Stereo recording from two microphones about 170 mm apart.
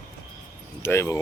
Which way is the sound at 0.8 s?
15° left (ahead or behind).